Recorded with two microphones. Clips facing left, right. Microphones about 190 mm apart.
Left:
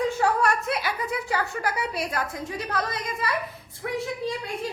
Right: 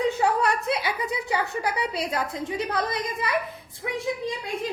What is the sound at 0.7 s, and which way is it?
Chuckle, 20° right (ahead or behind).